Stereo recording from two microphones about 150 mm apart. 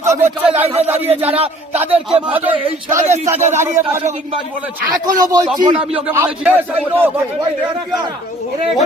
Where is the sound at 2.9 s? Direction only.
55° right (ahead or behind).